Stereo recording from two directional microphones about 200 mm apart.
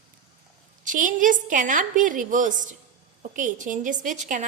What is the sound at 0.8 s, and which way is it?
A woman's voice, 40° right (ahead or behind).